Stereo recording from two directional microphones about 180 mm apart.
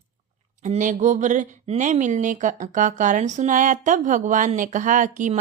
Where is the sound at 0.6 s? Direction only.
45° right (ahead or behind).